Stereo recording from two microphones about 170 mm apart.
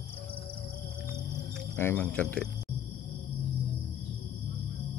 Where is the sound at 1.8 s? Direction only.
10° left (ahead or behind).